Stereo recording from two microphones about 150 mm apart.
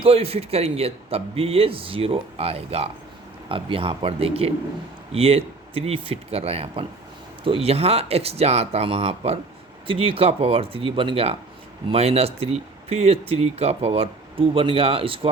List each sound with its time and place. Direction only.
0.0 s speech: 40° right (ahead or behind)